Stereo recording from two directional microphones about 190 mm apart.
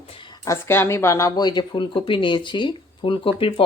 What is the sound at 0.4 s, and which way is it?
Speech, 15° left (ahead or behind).